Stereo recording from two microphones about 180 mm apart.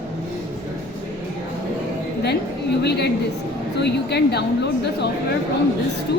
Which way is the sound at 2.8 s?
70° left (ahead or behind).